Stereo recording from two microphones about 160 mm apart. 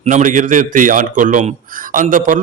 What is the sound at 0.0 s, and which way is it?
A man's voice, 50° right (ahead or behind).